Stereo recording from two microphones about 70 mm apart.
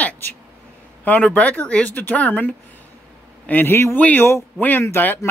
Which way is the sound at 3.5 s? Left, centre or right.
Left.